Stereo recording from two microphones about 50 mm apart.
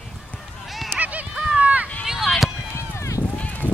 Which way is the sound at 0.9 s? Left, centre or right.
Right.